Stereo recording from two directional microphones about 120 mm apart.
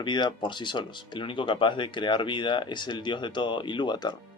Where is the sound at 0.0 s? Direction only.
40° left (ahead or behind).